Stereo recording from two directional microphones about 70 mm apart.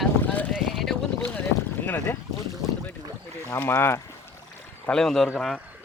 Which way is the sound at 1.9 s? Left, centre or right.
Left.